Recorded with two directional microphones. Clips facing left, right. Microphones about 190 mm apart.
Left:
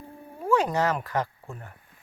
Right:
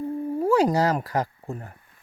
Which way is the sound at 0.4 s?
35° right (ahead or behind).